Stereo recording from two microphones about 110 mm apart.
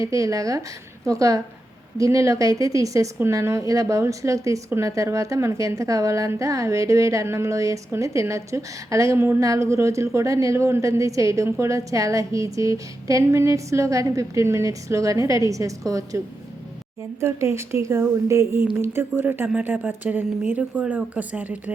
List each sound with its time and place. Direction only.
0.0 s a woman's voice: 30° right (ahead or behind); by 21.6 s 15° right (ahead or behind)